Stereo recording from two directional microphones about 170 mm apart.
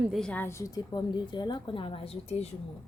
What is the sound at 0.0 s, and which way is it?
A woman's voice, centre (ahead or behind).